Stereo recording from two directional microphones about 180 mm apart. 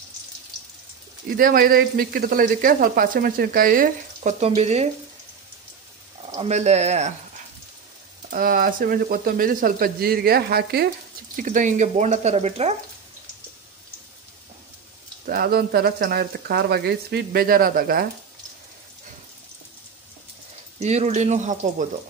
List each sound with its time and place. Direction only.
1.4 s speech: 55° right (ahead or behind); by 4.8 s 35° right (ahead or behind)
6.3 s speech: 35° right (ahead or behind)
8.3 s speech: 50° right (ahead or behind)
11.3 s speech: 45° right (ahead or behind)
15.2 s speech: 55° right (ahead or behind)
20.8 s speech: 40° right (ahead or behind)